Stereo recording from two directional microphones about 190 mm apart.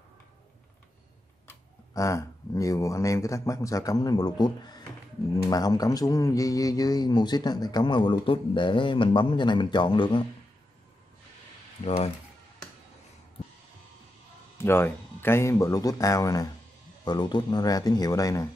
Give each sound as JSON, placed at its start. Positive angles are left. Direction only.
{"t": 1.5, "sound": "a man's voice", "side_deg": 15}
{"t": 11.8, "sound": "speech", "side_deg": 35}
{"t": 14.6, "sound": "a man's voice", "side_deg": 10}